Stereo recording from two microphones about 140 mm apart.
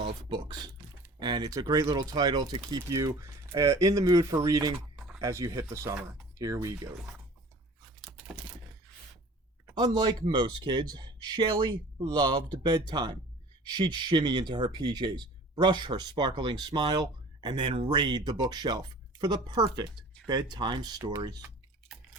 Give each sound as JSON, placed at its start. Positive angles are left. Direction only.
{"t": 0.3, "sound": "speech", "side_deg": -30}
{"t": 4.9, "sound": "a sound", "side_deg": -5}
{"t": 5.2, "sound": "speech", "side_deg": -20}
{"t": 9.7, "sound": "speech", "side_deg": -30}